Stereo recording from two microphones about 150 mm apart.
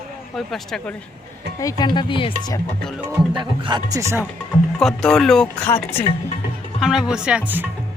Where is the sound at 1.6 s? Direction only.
25° left (ahead or behind).